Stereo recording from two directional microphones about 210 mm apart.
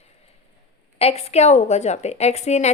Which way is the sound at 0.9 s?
30° left (ahead or behind).